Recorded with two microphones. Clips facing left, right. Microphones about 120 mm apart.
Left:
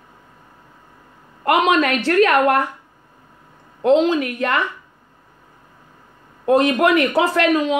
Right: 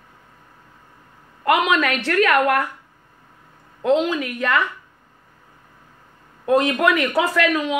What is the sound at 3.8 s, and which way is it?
Speech, 30° left (ahead or behind).